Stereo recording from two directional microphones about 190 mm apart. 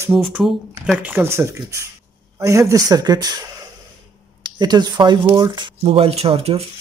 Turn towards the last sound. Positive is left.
turn(degrees=-30)  # may be behind; listen again after turning